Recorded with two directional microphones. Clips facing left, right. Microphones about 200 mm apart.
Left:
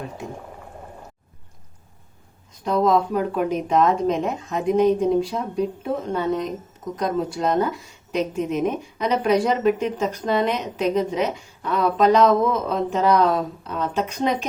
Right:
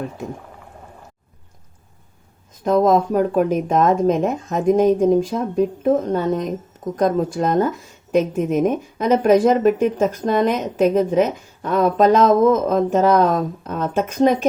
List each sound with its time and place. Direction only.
2.6 s a woman's voice: 45° right (ahead or behind)